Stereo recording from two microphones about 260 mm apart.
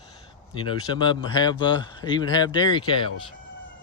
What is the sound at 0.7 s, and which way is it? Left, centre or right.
Speech, centre.